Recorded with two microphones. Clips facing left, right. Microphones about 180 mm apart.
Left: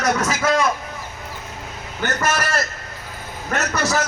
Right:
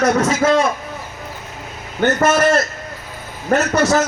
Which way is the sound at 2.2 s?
25° right (ahead or behind).